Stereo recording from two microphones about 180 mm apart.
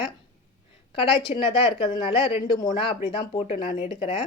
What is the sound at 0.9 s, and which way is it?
Speech, 30° left (ahead or behind).